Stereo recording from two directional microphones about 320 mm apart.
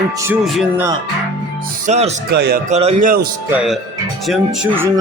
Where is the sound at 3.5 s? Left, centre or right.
Centre.